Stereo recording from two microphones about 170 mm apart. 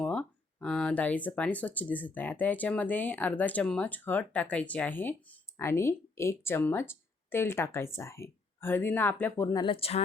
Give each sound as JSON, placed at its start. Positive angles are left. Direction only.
{"t": 0.0, "sound": "speech", "side_deg": 5}
{"t": 9.6, "sound": "speech", "side_deg": 30}